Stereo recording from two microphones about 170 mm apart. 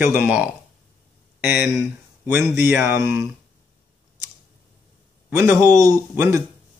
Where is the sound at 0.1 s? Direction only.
10° right (ahead or behind).